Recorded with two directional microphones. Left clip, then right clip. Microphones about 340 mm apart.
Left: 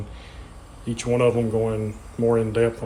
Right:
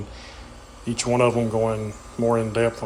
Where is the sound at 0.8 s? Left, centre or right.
Centre.